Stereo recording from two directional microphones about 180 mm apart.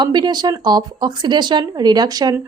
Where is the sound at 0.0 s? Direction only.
25° right (ahead or behind).